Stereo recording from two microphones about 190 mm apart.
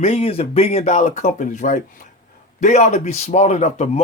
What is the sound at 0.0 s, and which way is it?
Speech, 35° left (ahead or behind).